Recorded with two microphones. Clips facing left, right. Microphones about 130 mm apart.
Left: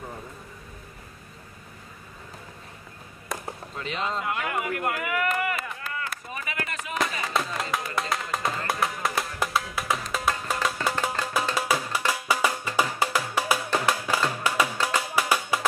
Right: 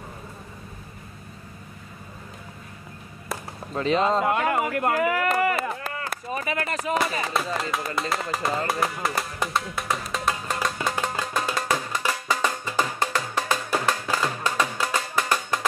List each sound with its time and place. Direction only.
3.3 s chop: centre (ahead or behind)
3.7 s a sound: 40° right (ahead or behind)
7.2 s music: centre (ahead or behind)